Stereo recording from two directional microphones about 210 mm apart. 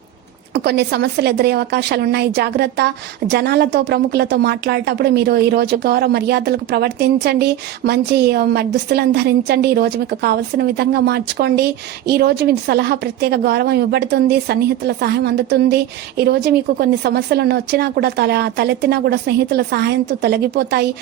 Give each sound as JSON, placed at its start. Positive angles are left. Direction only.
{"t": 0.5, "sound": "a woman's voice", "side_deg": -50}